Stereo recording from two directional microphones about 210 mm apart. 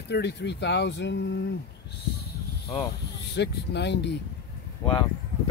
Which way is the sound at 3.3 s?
55° left (ahead or behind).